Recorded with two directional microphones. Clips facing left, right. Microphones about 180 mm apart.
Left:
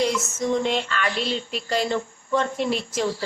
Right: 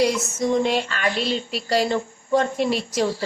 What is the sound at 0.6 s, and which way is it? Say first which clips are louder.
Speech: right 3 dB; 10° right (ahead or behind).